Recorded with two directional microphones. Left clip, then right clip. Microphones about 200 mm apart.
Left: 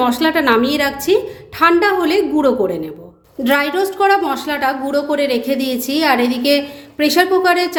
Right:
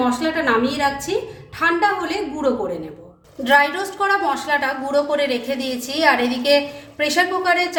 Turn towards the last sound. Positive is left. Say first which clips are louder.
# left 4 dB
turn(degrees=40)  # may be behind; listen again after turning